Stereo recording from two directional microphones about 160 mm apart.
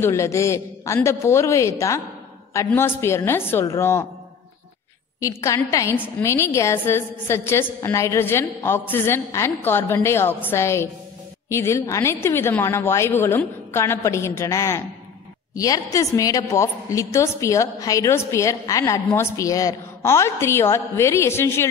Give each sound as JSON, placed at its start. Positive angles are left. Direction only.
{"t": 0.0, "sound": "a woman's voice", "side_deg": 15}
{"t": 5.2, "sound": "a woman's voice", "side_deg": 20}